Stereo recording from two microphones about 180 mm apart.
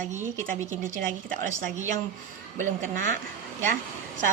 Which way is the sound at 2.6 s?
45° right (ahead or behind).